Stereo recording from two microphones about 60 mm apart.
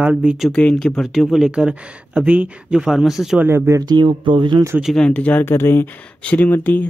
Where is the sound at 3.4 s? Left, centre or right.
Right.